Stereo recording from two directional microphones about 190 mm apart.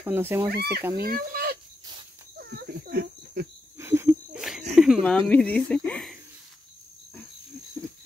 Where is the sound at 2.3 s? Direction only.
55° right (ahead or behind).